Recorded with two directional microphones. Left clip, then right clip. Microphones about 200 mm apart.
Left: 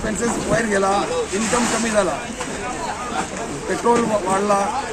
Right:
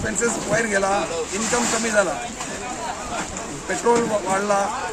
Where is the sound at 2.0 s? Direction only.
5° right (ahead or behind).